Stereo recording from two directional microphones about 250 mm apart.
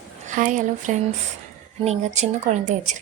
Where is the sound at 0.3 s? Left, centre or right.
Right.